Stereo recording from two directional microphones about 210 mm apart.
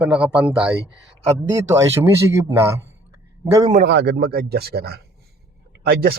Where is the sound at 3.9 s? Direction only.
55° right (ahead or behind).